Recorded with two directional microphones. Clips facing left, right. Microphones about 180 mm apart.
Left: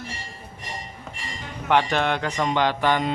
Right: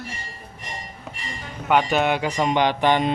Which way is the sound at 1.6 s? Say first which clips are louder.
Right 2 dB; 5° right (ahead or behind).